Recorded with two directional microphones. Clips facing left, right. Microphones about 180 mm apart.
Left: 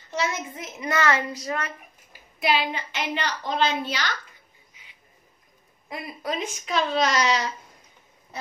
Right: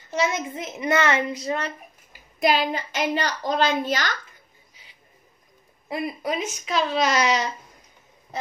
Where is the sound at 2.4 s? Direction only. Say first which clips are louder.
Right 3 dB; 45° right (ahead or behind).